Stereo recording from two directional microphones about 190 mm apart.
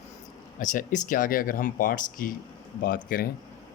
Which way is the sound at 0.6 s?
45° left (ahead or behind).